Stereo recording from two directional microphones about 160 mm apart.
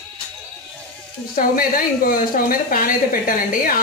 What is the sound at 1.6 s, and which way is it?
A woman's voice, 60° left (ahead or behind).